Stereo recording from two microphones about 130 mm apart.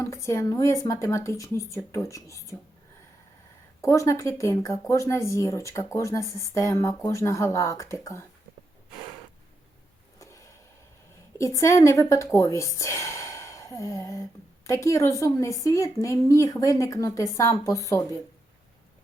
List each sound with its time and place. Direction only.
0.0 s speech: 20° left (ahead or behind)
3.8 s speech: 25° left (ahead or behind)
10.2 s a sound: 25° left (ahead or behind)
11.3 s speech: 25° left (ahead or behind)